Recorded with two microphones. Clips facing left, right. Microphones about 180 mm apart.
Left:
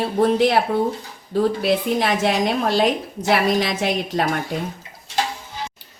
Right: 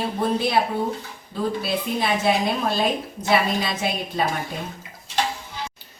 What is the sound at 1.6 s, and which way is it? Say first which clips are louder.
A woman's voice: left 5 dB; 85° left.